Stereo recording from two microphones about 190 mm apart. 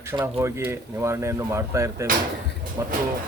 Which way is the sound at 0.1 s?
10° right (ahead or behind).